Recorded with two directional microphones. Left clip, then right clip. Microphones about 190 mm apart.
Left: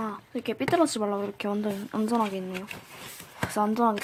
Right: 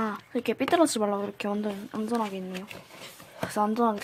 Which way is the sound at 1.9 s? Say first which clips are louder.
Left 4 dB; 10° left (ahead or behind).